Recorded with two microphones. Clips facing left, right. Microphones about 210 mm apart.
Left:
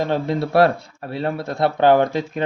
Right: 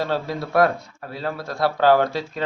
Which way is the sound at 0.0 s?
20° left (ahead or behind).